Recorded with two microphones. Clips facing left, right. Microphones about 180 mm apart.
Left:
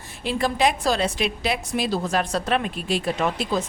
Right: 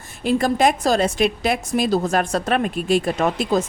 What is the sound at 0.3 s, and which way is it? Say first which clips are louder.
A woman's voice: right 4 dB; 45° right (ahead or behind).